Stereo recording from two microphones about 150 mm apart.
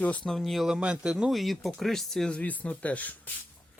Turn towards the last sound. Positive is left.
turn(degrees=10)  # may be behind; listen again after turning